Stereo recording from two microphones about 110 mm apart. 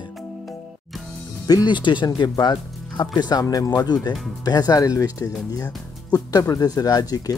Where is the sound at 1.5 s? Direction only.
40° left (ahead or behind).